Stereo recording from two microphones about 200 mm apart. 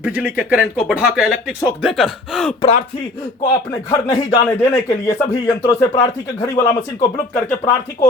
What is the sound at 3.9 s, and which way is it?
Speech, 20° left (ahead or behind).